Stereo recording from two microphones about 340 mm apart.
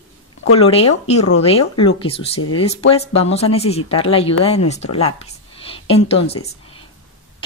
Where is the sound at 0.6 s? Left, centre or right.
Centre.